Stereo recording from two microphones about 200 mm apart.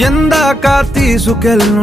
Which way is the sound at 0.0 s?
Centre (ahead or behind).